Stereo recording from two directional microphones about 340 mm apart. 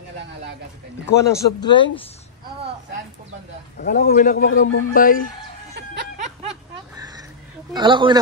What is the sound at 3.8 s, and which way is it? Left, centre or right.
A man's voice, left.